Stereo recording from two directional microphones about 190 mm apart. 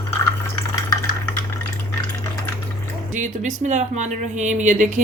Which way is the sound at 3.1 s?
40° right (ahead or behind).